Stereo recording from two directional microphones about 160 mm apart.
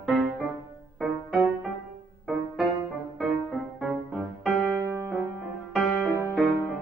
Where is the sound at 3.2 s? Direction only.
Centre (ahead or behind).